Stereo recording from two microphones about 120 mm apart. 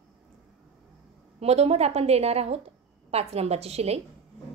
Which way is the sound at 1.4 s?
60° right (ahead or behind).